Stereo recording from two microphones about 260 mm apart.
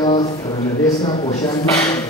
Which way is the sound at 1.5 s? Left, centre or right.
Centre.